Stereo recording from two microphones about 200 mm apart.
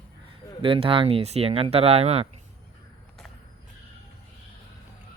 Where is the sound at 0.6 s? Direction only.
25° right (ahead or behind).